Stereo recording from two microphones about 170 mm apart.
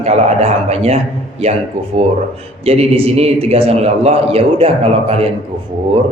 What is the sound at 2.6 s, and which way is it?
A man's voice, 40° right (ahead or behind).